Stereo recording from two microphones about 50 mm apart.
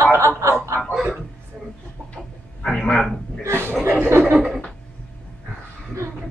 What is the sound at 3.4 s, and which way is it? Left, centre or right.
Chuckle, right.